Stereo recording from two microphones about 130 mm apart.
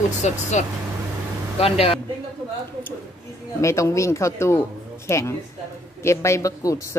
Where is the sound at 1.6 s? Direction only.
50° left (ahead or behind).